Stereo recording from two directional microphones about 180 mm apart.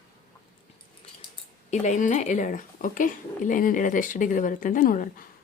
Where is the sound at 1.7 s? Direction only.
40° left (ahead or behind).